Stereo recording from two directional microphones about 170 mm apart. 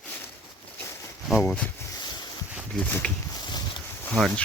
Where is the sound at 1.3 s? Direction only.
Centre (ahead or behind).